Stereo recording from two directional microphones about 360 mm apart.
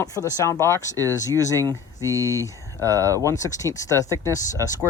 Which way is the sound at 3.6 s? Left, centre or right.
Centre.